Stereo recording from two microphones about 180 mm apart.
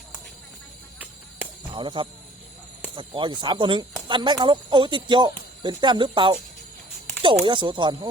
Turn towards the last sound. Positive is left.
turn(degrees=-25)  # may be behind; listen again after turning